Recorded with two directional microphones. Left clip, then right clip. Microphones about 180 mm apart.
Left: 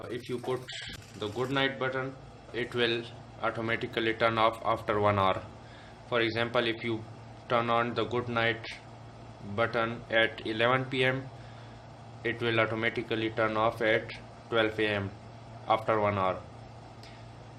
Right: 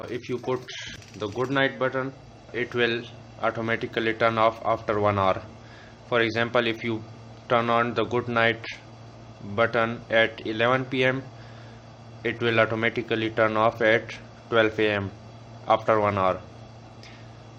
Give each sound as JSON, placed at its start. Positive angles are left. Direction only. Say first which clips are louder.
{"t": 0.1, "sound": "speech", "louder": "right 5 dB", "side_deg": -35}
{"t": 12.2, "sound": "speech", "louder": "right 6 dB", "side_deg": -30}